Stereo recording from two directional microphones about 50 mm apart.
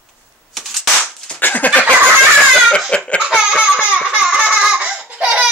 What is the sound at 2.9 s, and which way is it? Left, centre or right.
Laughter, left.